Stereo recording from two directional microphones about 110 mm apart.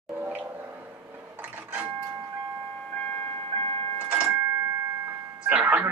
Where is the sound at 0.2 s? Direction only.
15° right (ahead or behind).